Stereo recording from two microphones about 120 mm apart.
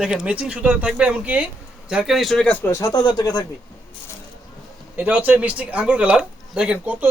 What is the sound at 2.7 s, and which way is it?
Speech, 30° left (ahead or behind).